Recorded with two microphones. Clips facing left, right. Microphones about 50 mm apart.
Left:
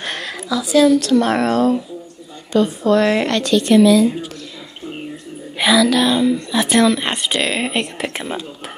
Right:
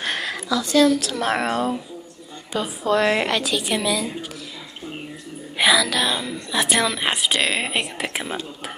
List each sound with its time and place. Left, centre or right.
0.0 s a woman's voice: centre
5.6 s a woman's voice: centre